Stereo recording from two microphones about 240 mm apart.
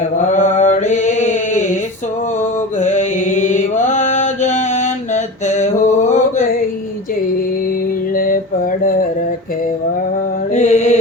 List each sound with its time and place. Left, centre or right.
0.3 s mantra: left
2.8 s mantra: left
8.1 s mantra: left
10.5 s mantra: left